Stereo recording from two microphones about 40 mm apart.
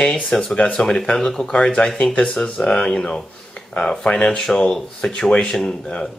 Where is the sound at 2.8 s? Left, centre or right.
Left.